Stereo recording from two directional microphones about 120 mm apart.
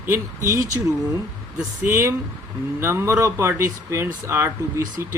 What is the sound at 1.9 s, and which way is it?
Speech, 25° right (ahead or behind).